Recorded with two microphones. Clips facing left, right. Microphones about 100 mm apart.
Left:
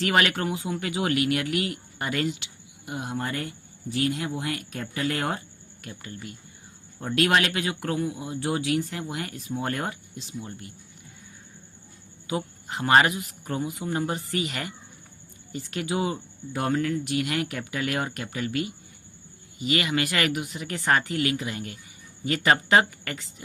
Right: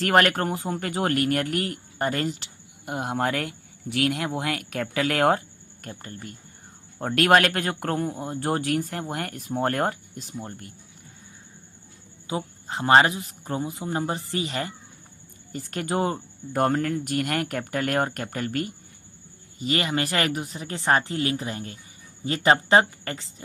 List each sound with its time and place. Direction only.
0.0 s speech: 45° right (ahead or behind)
2.8 s speech: 55° right (ahead or behind)
5.8 s speech: 40° right (ahead or behind)
12.3 s a man's voice: 30° right (ahead or behind)
15.5 s a man's voice: 40° right (ahead or behind)